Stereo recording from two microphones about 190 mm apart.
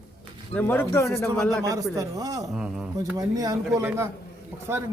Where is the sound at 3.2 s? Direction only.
20° right (ahead or behind).